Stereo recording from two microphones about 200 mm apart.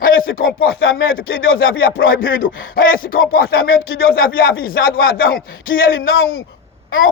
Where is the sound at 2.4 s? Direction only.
45° left (ahead or behind).